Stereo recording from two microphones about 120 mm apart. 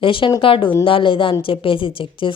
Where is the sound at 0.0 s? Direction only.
45° left (ahead or behind).